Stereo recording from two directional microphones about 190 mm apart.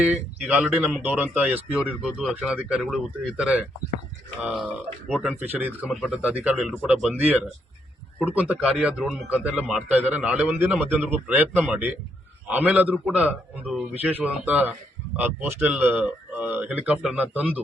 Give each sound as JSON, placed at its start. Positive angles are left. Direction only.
{"t": 0.0, "sound": "a man's voice", "side_deg": -10}
{"t": 5.4, "sound": "a man's voice", "side_deg": -10}